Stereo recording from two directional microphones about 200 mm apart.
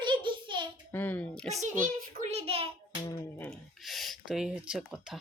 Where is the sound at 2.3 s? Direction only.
30° right (ahead or behind).